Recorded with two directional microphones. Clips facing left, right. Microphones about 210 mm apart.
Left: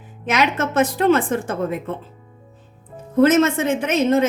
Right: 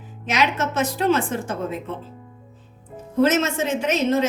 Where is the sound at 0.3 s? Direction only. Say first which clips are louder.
Left 2 dB; 55° left (ahead or behind).